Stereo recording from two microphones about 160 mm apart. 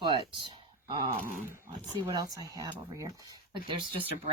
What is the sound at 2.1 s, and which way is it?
Speech, 25° right (ahead or behind).